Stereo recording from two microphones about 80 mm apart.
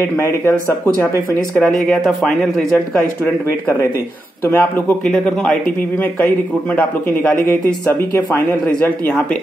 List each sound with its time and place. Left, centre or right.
0.0 s speech: left
1.5 s speech: centre
4.5 s speech: left
5.0 s speech: centre
6.7 s speech: centre
8.6 s speech: centre